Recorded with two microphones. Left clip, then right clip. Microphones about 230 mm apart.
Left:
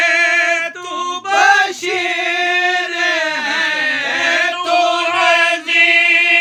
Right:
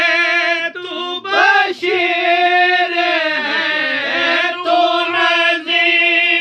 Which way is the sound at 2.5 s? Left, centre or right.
Centre.